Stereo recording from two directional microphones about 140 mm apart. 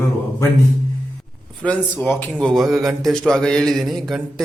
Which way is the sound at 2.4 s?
Centre (ahead or behind).